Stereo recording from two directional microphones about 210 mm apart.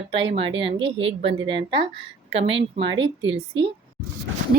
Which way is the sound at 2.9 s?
60° right (ahead or behind).